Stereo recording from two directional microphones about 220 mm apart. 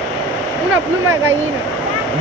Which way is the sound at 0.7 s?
10° right (ahead or behind).